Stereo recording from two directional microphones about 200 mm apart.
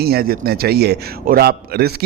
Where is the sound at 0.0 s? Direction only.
50° right (ahead or behind).